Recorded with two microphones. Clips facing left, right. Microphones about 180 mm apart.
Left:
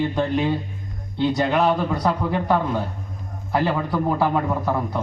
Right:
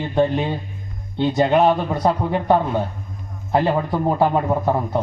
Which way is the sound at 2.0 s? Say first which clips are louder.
Right 2 dB; 25° right (ahead or behind).